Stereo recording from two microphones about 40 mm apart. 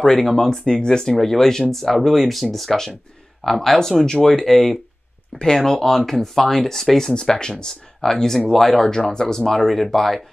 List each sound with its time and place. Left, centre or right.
0.0 s speech: centre
0.3 s speech: centre
7.2 s speech: centre